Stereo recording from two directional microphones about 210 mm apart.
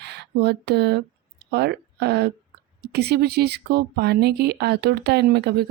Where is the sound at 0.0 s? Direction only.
50° right (ahead or behind).